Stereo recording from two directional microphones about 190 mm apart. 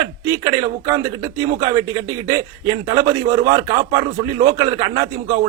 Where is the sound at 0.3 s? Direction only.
20° right (ahead or behind).